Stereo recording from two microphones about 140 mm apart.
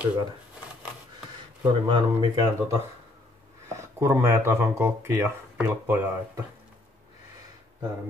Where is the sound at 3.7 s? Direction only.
20° right (ahead or behind).